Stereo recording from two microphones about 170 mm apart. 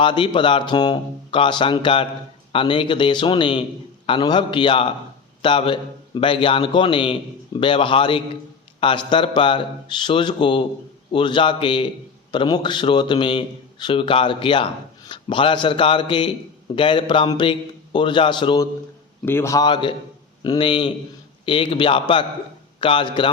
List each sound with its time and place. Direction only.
0.0 s a man's voice: 30° left (ahead or behind)
19.2 s a man's voice: 15° left (ahead or behind)